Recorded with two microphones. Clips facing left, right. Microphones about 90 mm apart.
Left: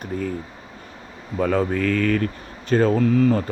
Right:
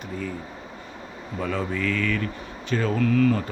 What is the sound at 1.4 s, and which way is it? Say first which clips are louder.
Speech: left 7 dB; 50° left (ahead or behind).